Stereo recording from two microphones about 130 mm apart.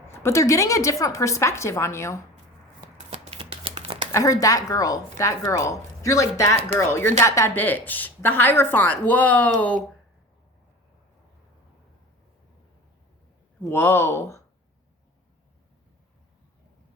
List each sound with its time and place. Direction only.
0.1 s a woman's voice: 20° left (ahead or behind)
3.1 s shuffling cards: 45° right (ahead or behind)
4.1 s a woman's voice: 25° left (ahead or behind); by 9.7 s 10° left (ahead or behind)
13.6 s a woman's voice: 15° left (ahead or behind)